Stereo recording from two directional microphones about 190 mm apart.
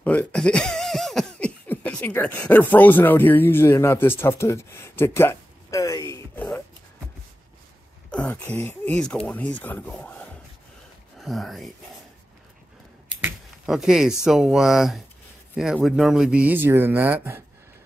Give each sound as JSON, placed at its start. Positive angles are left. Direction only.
{"t": 0.0, "sound": "speech", "side_deg": 5}
{"t": 8.1, "sound": "speech", "side_deg": 5}
{"t": 13.2, "sound": "speech", "side_deg": -5}